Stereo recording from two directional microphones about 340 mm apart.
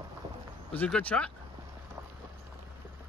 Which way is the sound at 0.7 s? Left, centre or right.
Centre.